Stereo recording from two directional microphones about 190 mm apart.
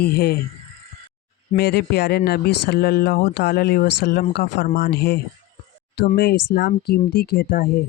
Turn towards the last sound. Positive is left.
turn(degrees=50)  # may be behind; listen again after turning